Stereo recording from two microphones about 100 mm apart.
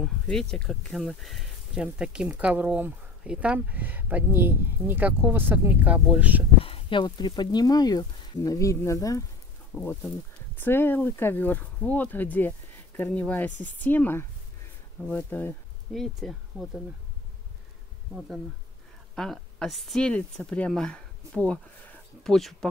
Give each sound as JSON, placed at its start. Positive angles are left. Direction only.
{"t": 0.0, "sound": "speech", "side_deg": 5}
{"t": 1.8, "sound": "speech", "side_deg": -10}
{"t": 6.6, "sound": "speech", "side_deg": 60}
{"t": 9.7, "sound": "speech", "side_deg": 20}
{"t": 15.9, "sound": "speech", "side_deg": 0}
{"t": 19.1, "sound": "speech", "side_deg": 5}